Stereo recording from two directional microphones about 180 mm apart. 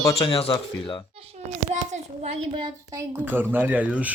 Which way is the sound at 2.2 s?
35° right (ahead or behind).